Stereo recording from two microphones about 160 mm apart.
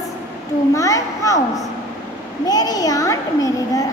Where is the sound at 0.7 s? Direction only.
20° left (ahead or behind).